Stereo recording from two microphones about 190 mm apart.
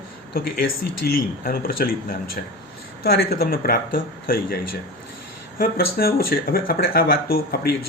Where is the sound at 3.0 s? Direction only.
55° left (ahead or behind).